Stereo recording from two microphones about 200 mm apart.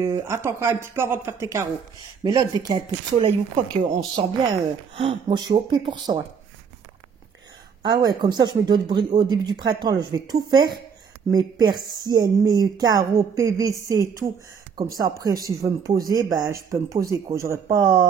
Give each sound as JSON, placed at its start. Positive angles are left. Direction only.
{"t": 0.0, "sound": "speech", "side_deg": -15}
{"t": 7.8, "sound": "speech", "side_deg": -20}
{"t": 12.0, "sound": "speech", "side_deg": -20}